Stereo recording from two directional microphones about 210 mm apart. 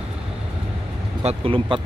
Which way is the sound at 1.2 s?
25° right (ahead or behind).